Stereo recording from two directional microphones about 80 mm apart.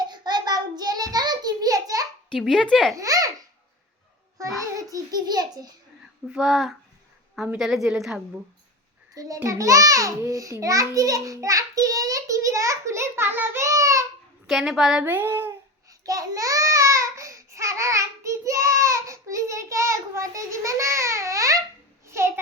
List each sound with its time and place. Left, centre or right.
0.1 s child singing: right
2.3 s speech: centre
2.9 s babbling: right
4.6 s a child's voice: right
6.2 s a woman's voice: centre
9.1 s a sound: right
13.6 s a sound: right
14.4 s speech: centre
15.0 s speech: right
15.9 s a sound: right